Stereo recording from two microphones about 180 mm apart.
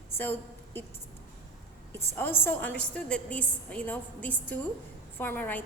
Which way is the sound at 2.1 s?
10° left (ahead or behind).